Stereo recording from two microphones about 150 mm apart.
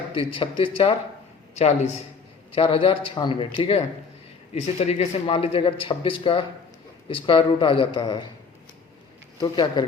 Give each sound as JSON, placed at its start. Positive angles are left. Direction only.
{"t": 0.1, "sound": "speech", "side_deg": 35}
{"t": 1.5, "sound": "a man's voice", "side_deg": 45}
{"t": 2.6, "sound": "speech", "side_deg": 35}
{"t": 9.4, "sound": "speech", "side_deg": 25}